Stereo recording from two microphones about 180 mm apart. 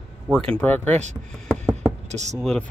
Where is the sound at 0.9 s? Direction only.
40° right (ahead or behind).